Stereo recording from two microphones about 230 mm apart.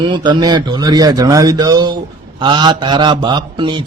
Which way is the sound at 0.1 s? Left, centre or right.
Centre.